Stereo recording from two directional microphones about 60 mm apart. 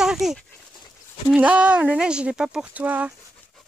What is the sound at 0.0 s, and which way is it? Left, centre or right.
Dog, centre.